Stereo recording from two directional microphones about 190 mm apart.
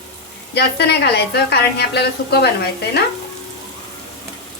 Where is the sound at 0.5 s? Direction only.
60° left (ahead or behind).